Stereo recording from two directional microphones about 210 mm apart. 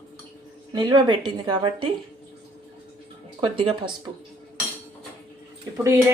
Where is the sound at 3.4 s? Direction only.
25° right (ahead or behind).